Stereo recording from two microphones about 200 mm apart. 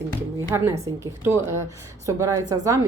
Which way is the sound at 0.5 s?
15° right (ahead or behind).